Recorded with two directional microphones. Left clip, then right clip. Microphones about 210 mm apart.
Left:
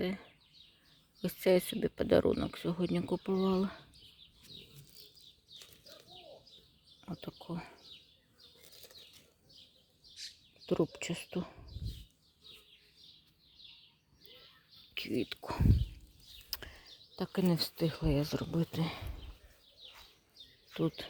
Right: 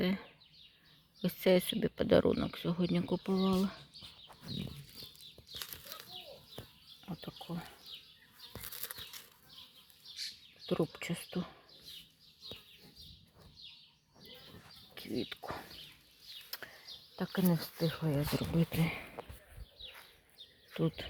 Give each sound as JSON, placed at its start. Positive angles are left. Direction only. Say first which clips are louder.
{"t": 0.0, "sound": "speech", "louder": "right 2 dB", "side_deg": -5}
{"t": 7.0, "sound": "speech", "louder": "left 1 dB", "side_deg": 25}
{"t": 8.8, "sound": "a sound", "louder": "right 6 dB", "side_deg": 5}
{"t": 10.7, "sound": "speech", "louder": "left 2 dB", "side_deg": 20}
{"t": 15.1, "sound": "speech", "louder": "left 1 dB", "side_deg": 25}
{"t": 16.5, "sound": "a sound", "louder": "left 4 dB", "side_deg": 15}
{"t": 17.3, "sound": "speech", "louder": "left 2 dB", "side_deg": 30}
{"t": 18.2, "sound": "speech", "louder": "even", "side_deg": 0}
{"t": 20.7, "sound": "speech", "louder": "left 1 dB", "side_deg": 5}